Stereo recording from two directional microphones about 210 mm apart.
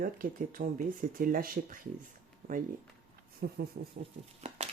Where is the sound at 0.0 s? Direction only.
40° right (ahead or behind).